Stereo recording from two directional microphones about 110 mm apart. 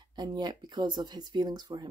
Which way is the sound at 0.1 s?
45° right (ahead or behind).